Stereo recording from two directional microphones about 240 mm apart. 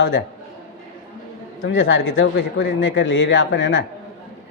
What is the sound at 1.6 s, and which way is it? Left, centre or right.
Speech, left.